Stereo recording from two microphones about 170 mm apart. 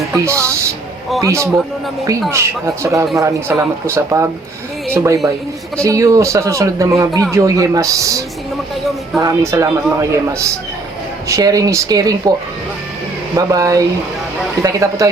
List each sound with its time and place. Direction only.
0.1 s a sound: 15° right (ahead or behind)
1.2 s a man's voice: 15° right (ahead or behind)
9.2 s a man's voice: 15° right (ahead or behind)
13.3 s speech: 20° right (ahead or behind)